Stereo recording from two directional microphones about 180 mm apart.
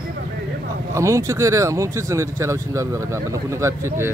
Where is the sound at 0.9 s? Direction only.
15° right (ahead or behind).